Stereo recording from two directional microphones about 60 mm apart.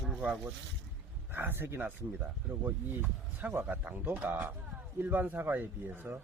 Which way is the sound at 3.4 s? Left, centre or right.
Right.